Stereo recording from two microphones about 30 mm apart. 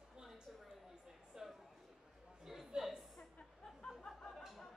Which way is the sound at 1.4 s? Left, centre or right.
Centre.